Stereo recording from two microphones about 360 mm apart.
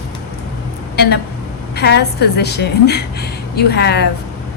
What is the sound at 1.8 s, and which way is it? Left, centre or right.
A woman's voice, left.